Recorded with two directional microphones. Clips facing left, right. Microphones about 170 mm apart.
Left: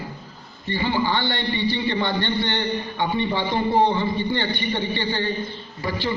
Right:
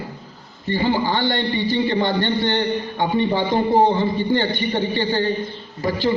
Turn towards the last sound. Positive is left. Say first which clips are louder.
# right 6 dB
turn(degrees=-40)  # may be behind; listen again after turning